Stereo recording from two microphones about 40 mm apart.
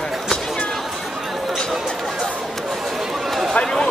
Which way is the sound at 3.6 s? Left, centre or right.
Centre.